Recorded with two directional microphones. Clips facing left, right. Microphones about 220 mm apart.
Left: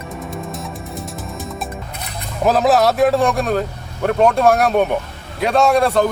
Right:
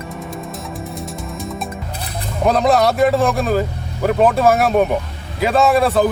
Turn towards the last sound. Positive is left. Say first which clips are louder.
# even
turn(degrees=0)  # may be behind; listen again after turning